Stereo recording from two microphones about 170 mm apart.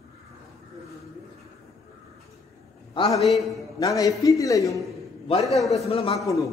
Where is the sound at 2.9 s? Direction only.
30° left (ahead or behind).